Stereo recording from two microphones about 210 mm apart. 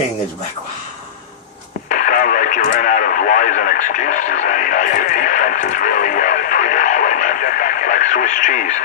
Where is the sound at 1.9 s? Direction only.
40° left (ahead or behind).